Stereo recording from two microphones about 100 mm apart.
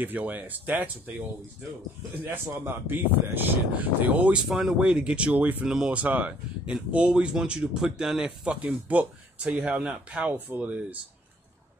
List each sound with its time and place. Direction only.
0.0 s speech: 15° right (ahead or behind)